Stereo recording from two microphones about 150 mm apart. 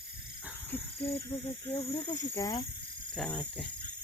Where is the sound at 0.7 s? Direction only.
15° left (ahead or behind).